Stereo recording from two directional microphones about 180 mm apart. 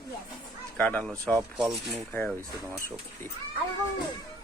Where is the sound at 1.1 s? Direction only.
15° right (ahead or behind).